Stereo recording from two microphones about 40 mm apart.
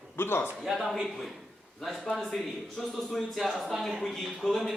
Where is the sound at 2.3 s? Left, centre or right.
Centre.